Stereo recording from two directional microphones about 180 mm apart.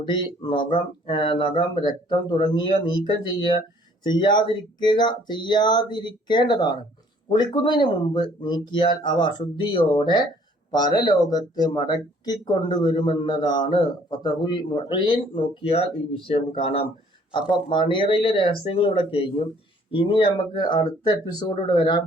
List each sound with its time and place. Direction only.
0.0 s speech: 25° left (ahead or behind)